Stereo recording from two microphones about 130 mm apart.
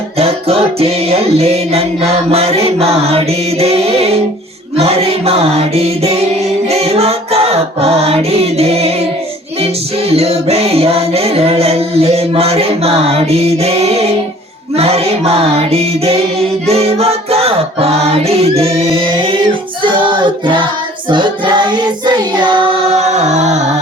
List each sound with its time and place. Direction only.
0.2 s music: 50° right (ahead or behind)
10.1 s music: 50° right (ahead or behind)
19.1 s child singing: 45° right (ahead or behind)
19.8 s choir: 40° right (ahead or behind)
21.1 s child singing: 35° right (ahead or behind); by 23.7 s 60° right (ahead or behind)